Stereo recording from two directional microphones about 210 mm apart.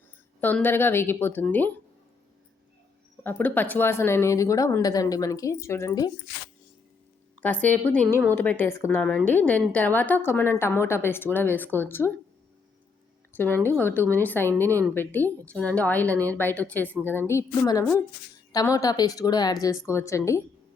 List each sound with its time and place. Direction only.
0.4 s a woman's voice: 10° left (ahead or behind)
3.2 s a woman's voice: 10° left (ahead or behind)
7.4 s a woman's voice: 5° left (ahead or behind)
13.3 s a woman's voice: 10° left (ahead or behind)